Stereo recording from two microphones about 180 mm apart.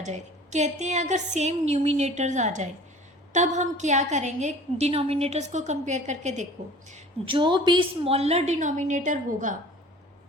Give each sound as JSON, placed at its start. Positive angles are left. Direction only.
{"t": 0.0, "sound": "a woman's voice", "side_deg": -40}
{"t": 6.9, "sound": "a woman's voice", "side_deg": -30}